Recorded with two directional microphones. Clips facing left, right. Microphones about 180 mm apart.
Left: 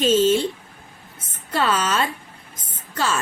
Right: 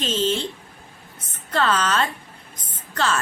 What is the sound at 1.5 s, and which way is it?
Speech, 10° left (ahead or behind).